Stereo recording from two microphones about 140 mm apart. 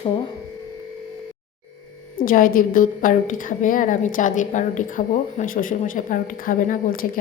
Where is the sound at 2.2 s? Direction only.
85° left.